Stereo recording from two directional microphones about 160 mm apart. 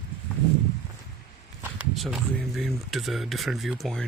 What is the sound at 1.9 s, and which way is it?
Speech, centre (ahead or behind).